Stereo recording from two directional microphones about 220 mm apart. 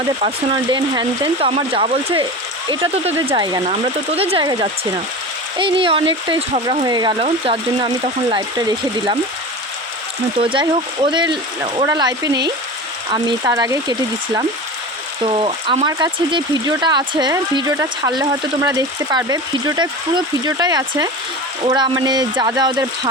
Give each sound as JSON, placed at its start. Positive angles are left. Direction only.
{"t": 0.2, "sound": "speech", "side_deg": -25}
{"t": 10.3, "sound": "speech", "side_deg": -25}
{"t": 15.2, "sound": "speech", "side_deg": -25}